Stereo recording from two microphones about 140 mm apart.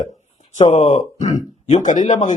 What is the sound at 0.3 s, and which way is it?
A man's voice, 50° left (ahead or behind).